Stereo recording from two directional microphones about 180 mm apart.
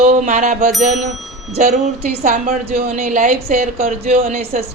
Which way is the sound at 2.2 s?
45° right (ahead or behind).